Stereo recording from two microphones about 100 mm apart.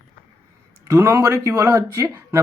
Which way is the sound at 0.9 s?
25° right (ahead or behind).